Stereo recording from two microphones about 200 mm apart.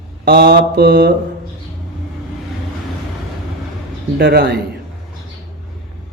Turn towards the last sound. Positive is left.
turn(degrees=-50)  # may be behind; listen again after turning